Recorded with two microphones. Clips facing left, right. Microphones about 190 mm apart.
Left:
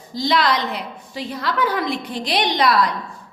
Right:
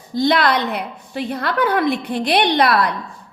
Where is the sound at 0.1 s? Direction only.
55° right (ahead or behind).